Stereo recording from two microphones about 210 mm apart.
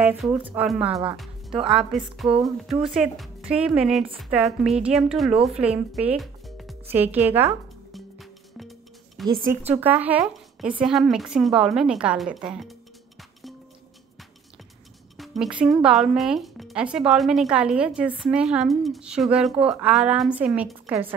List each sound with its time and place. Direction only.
0.0 s speech: 10° right (ahead or behind)
2.2 s a sound: 25° right (ahead or behind)
2.7 s speech: centre (ahead or behind)
6.0 s music: centre (ahead or behind)
9.7 s a woman's voice: 10° right (ahead or behind)
15.1 s speech: centre (ahead or behind)